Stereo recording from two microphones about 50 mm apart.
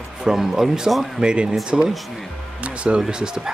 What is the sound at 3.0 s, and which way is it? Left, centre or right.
Speech, centre.